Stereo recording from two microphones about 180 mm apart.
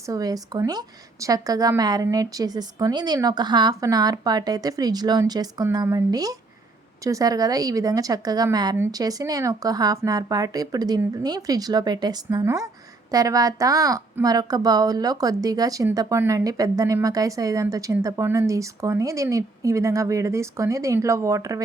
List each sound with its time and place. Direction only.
0.0 s a woman's voice: 20° right (ahead or behind)